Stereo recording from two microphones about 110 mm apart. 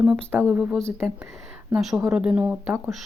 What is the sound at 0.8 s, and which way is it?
Speech, 5° left (ahead or behind).